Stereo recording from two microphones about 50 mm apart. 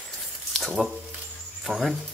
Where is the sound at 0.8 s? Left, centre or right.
Centre.